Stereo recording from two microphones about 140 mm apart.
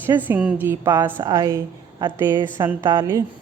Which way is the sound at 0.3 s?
10° right (ahead or behind).